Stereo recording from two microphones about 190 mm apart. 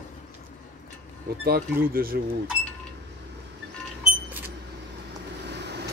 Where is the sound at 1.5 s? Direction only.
50° right (ahead or behind).